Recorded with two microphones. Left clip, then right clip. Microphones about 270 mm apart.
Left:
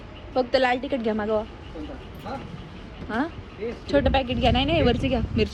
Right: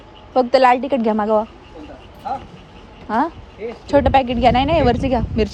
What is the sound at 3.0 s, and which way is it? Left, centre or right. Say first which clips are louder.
A woman's voice: right 9 dB; right.